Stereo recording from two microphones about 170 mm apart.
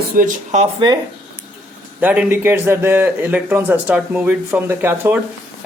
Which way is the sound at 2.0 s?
10° right (ahead or behind).